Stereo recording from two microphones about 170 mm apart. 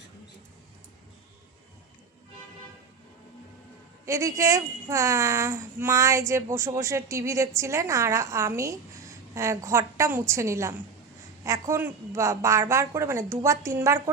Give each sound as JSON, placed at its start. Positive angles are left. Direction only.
{"t": 4.0, "sound": "a woman's voice", "side_deg": -20}